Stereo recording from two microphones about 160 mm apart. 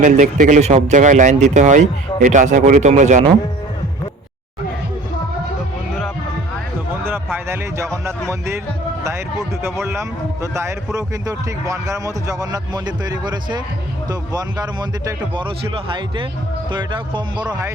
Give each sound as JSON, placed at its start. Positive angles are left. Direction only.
{"t": 0.0, "sound": "speech", "side_deg": -55}
{"t": 7.0, "sound": "speech", "side_deg": -15}
{"t": 9.6, "sound": "speech", "side_deg": -15}